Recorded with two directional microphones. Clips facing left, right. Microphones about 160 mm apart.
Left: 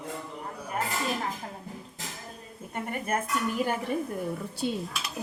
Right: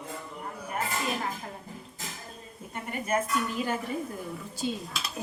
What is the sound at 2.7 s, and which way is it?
Speech, 50° left (ahead or behind).